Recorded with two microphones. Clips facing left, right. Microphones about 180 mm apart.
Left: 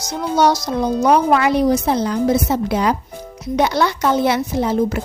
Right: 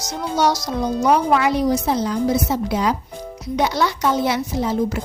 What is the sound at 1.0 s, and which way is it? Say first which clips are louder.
Speech: left 2 dB; 55° left (ahead or behind).